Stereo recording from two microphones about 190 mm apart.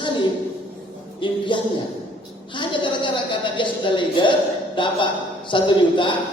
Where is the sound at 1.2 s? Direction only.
25° left (ahead or behind).